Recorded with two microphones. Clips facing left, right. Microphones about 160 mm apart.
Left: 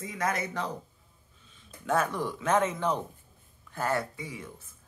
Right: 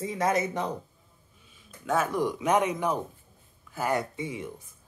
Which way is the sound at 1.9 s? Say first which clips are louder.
Right 1 dB; centre (ahead or behind).